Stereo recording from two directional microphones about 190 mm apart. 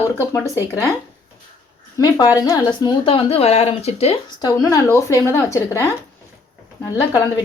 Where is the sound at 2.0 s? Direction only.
20° left (ahead or behind).